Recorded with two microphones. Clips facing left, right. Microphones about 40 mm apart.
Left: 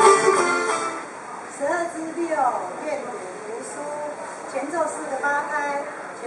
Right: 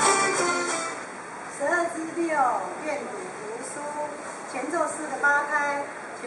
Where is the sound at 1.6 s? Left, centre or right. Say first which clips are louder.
Left 1 dB; centre.